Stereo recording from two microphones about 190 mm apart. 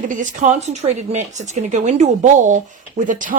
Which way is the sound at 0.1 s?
40° right (ahead or behind).